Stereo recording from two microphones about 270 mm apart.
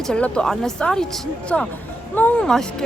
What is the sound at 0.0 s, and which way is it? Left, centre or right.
Speech, centre.